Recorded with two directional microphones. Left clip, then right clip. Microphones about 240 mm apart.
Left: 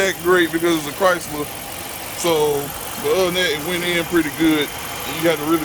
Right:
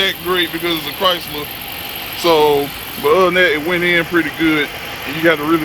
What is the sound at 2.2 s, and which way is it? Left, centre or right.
Speech, centre.